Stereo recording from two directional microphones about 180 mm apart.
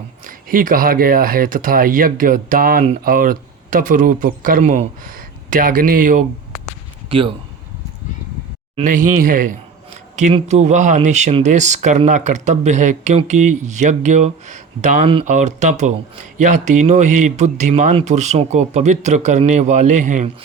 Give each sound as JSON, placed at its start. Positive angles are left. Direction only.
{"t": 0.3, "sound": "speech", "side_deg": -50}
{"t": 7.1, "sound": "speech", "side_deg": -30}
{"t": 8.8, "sound": "speech", "side_deg": -50}